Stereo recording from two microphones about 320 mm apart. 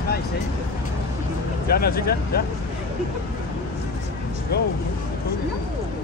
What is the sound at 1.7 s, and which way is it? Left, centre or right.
Speech, left.